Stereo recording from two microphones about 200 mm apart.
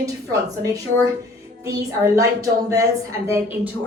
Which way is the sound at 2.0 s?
15° right (ahead or behind).